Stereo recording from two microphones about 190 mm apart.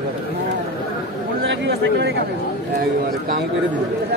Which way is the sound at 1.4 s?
65° right (ahead or behind).